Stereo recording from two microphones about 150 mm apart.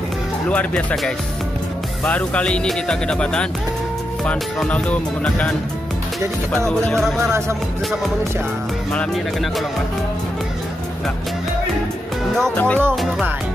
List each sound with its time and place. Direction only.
0.5 s speech: 10° left (ahead or behind)
6.5 s speech: 5° left (ahead or behind)
7.2 s speech: 15° right (ahead or behind)
8.9 s speech: centre (ahead or behind)
12.4 s speech: 5° left (ahead or behind)